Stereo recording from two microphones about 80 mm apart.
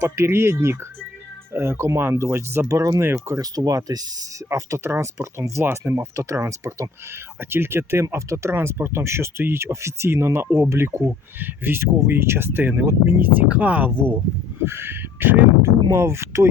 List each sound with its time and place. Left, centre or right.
0.0 s speech: right
2.6 s speech: right
3.0 s speech: right
3.3 s speech: right
4.4 s speech: right; by 13.9 s centre
14.6 s speech: right